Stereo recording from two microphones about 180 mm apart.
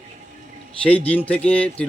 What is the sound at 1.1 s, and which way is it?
Speech, 10° left (ahead or behind).